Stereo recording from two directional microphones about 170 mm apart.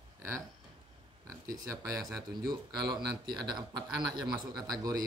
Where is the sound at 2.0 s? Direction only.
Centre (ahead or behind).